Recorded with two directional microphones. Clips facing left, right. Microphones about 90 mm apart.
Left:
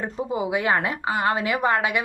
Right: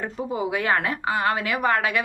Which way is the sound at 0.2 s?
20° left (ahead or behind).